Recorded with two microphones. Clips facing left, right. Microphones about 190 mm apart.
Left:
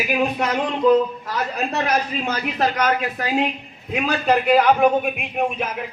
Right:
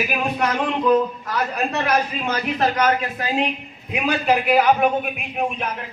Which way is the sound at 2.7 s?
25° right (ahead or behind).